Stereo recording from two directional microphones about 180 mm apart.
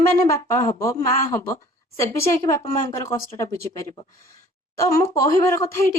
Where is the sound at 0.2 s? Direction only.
15° left (ahead or behind).